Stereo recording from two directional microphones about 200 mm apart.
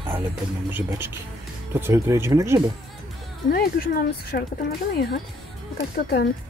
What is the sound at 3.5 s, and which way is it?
Speech, 50° left (ahead or behind).